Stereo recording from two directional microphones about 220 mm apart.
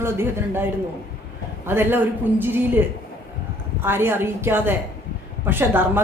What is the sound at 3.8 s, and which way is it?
A woman's voice, 10° right (ahead or behind).